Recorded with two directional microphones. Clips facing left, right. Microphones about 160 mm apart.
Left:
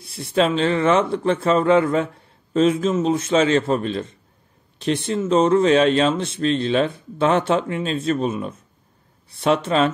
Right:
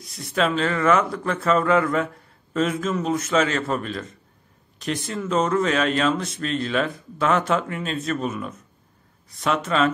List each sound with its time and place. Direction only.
0.0 s speech: 30° left (ahead or behind)